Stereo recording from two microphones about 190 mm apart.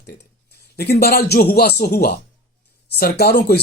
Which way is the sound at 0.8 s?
55° left (ahead or behind).